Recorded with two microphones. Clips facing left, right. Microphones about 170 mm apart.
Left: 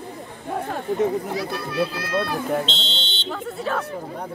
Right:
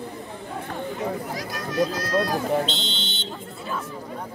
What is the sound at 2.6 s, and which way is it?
Buzzer, 25° left (ahead or behind).